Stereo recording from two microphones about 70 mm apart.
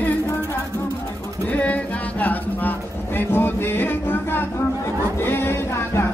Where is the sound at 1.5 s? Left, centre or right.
Left.